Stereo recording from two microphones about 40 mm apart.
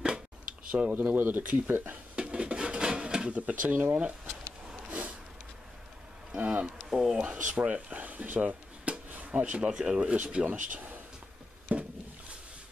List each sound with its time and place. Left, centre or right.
0.7 s speech: right
1.1 s speech: right
2.1 s dishes: right
3.3 s speech: right
4.8 s a sound: right
6.3 s speech: right
6.9 s speech: centre
7.2 s speech: right
8.4 s a sound: right
9.1 s speech: right
10.0 s speech: right
11.7 s a sound: right